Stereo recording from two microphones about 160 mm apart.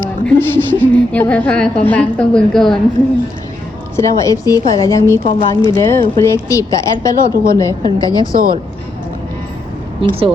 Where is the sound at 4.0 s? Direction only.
20° left (ahead or behind).